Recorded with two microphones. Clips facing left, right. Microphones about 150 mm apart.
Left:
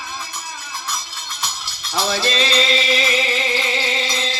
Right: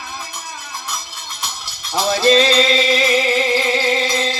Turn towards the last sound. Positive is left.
turn(degrees=-50)  # may be behind; listen again after turning